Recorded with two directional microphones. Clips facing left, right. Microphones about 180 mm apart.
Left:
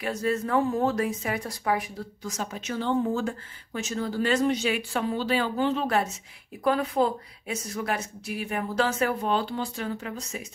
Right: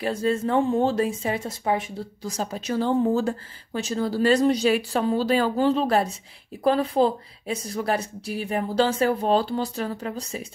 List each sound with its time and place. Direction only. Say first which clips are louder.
0.0 s speech: right 4 dB; 30° right (ahead or behind)